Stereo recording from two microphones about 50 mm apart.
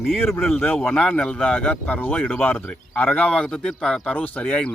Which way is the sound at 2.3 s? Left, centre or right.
Left.